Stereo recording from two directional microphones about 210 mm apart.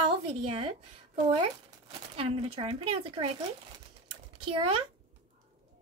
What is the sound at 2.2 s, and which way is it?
A child's voice, 30° right (ahead or behind).